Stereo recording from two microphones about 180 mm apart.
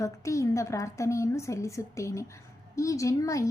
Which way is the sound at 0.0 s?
15° left (ahead or behind).